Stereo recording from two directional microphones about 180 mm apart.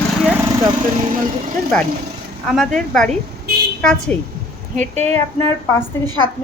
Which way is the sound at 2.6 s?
5° left (ahead or behind).